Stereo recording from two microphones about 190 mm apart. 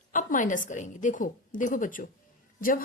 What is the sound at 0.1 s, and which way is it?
A woman's voice, 45° left (ahead or behind).